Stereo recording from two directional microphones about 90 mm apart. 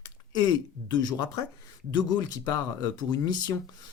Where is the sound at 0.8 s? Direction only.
55° left (ahead or behind).